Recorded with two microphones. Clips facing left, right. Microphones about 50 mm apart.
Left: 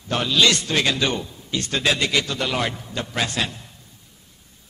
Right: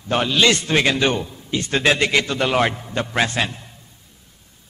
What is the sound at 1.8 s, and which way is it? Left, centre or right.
A man's voice, right.